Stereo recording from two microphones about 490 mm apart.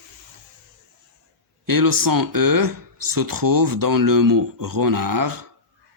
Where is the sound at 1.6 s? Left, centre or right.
Right.